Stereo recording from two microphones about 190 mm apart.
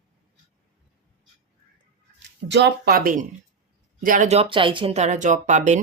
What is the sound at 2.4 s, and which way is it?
Speech, 60° right (ahead or behind).